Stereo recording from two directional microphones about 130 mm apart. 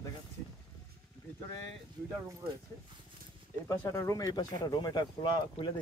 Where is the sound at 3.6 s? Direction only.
25° left (ahead or behind).